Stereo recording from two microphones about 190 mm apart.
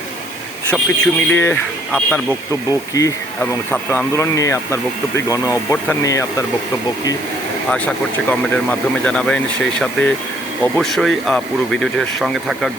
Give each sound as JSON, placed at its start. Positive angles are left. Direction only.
{"t": 0.7, "sound": "speech", "side_deg": 10}
{"t": 7.7, "sound": "speech", "side_deg": 5}